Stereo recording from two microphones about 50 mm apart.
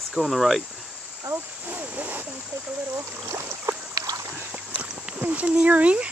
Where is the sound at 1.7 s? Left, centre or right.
Right.